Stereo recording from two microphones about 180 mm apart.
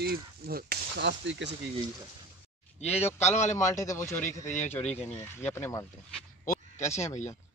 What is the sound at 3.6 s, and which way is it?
Speech, 15° left (ahead or behind).